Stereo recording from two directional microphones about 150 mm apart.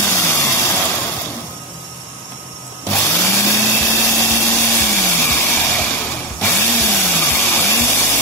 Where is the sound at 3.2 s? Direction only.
20° left (ahead or behind).